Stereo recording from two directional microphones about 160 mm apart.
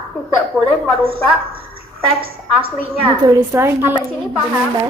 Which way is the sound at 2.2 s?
35° right (ahead or behind).